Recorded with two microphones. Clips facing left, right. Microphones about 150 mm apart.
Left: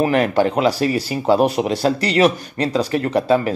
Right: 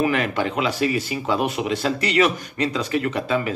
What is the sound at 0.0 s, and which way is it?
Speech, 40° left (ahead or behind).